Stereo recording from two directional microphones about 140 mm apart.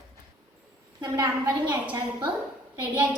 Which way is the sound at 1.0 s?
30° right (ahead or behind).